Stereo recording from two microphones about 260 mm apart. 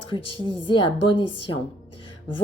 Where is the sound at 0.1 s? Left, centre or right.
Centre.